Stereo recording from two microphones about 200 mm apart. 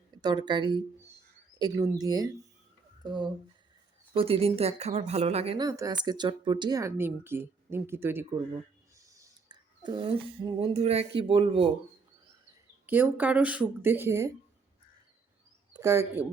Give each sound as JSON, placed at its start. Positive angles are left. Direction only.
{"t": 0.1, "sound": "speech", "side_deg": -20}
{"t": 5.6, "sound": "speech", "side_deg": -20}
{"t": 12.8, "sound": "speech", "side_deg": -10}
{"t": 15.8, "sound": "speech", "side_deg": -15}